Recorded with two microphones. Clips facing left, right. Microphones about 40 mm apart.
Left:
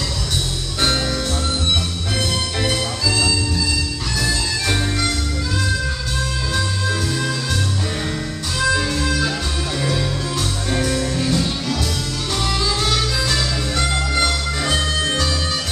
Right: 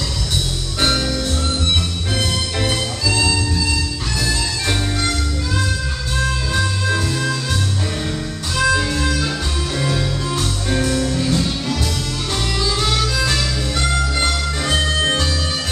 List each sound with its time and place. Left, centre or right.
2.1 s music: centre
4.3 s music: centre
8.5 s music: centre
12.5 s music: centre
14.1 s music: centre
14.9 s music: right